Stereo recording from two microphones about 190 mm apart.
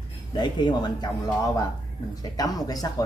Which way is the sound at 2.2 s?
20° left (ahead or behind).